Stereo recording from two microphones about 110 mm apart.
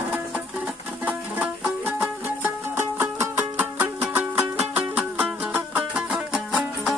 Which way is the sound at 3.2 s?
20° right (ahead or behind).